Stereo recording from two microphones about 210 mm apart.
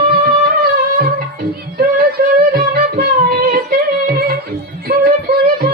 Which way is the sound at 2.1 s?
45° right (ahead or behind).